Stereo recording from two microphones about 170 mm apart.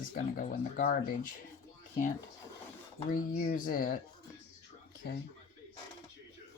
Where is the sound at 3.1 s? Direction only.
55° left (ahead or behind).